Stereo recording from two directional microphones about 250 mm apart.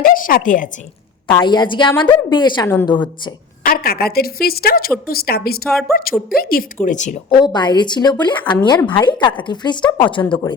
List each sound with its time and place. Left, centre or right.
0.0 s a woman's voice: left
1.3 s a woman's voice: centre
3.6 s a woman's voice: left
5.6 s a woman's voice: centre
6.3 s a woman's voice: left
7.4 s a woman's voice: centre